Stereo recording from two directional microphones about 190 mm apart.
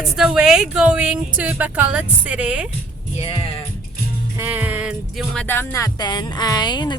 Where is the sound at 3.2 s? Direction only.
30° left (ahead or behind).